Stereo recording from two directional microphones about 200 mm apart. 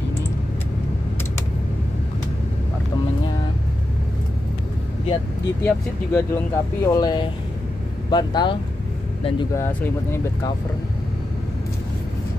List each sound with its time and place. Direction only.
5.7 s speech: 10° left (ahead or behind)